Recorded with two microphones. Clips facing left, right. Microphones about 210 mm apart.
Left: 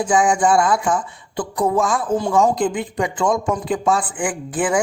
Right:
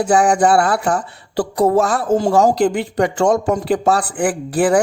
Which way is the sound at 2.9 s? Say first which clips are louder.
Right 5 dB; 40° right (ahead or behind).